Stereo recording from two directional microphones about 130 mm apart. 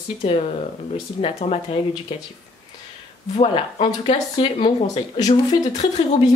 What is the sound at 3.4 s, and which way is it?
Speech, 45° left (ahead or behind).